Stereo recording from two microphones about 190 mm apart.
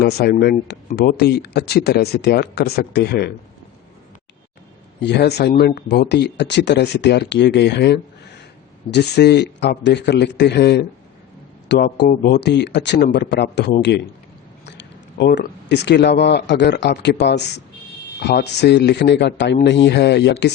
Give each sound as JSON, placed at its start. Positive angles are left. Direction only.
{"t": 0.0, "sound": "speech", "side_deg": 55}
{"t": 5.0, "sound": "speech", "side_deg": 60}
{"t": 14.7, "sound": "speech", "side_deg": 65}